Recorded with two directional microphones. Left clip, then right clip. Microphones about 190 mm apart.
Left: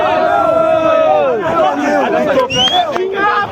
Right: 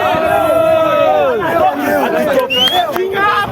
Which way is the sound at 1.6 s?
40° right (ahead or behind).